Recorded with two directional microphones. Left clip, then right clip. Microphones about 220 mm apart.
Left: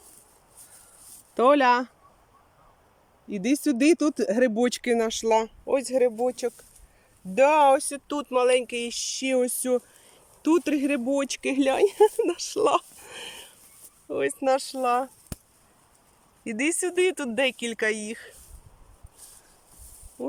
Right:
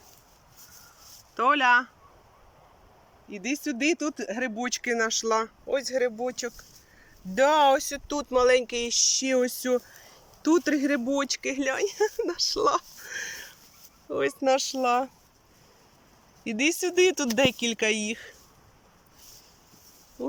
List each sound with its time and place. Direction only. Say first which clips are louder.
1.4 s speech: left 2 dB; 20° left (ahead or behind)
3.2 s speech: left 6 dB; 25° left (ahead or behind)
14.1 s speech: even; centre (ahead or behind)
16.4 s speech: right 1 dB; centre (ahead or behind)